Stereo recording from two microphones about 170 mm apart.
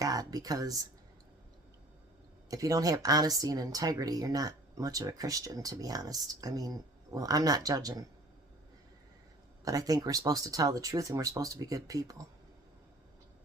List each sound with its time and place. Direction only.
0.0 s speech: 20° right (ahead or behind)
2.5 s speech: 20° right (ahead or behind)
9.6 s speech: 20° right (ahead or behind)